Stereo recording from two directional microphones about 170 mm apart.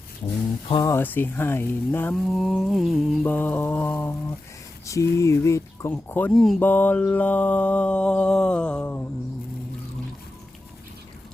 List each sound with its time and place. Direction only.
0.7 s mantra: 20° left (ahead or behind)
2.2 s mantra: centre (ahead or behind)